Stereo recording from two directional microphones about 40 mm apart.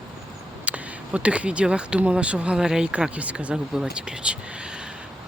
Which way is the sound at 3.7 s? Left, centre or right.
Right.